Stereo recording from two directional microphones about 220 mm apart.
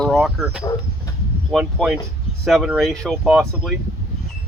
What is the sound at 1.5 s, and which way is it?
Speech, centre (ahead or behind).